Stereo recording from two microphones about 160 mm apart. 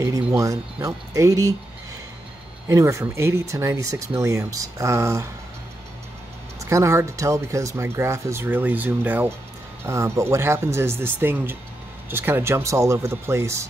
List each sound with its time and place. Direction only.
0.4 s speech: 20° right (ahead or behind)
2.7 s speech: 20° right (ahead or behind)
6.6 s speech: 20° right (ahead or behind)